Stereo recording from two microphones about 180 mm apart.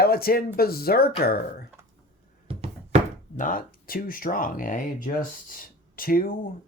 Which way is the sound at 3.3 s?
50° left (ahead or behind).